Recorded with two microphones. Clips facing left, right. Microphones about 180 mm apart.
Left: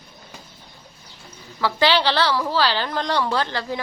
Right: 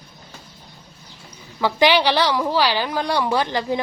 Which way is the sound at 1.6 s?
15° right (ahead or behind).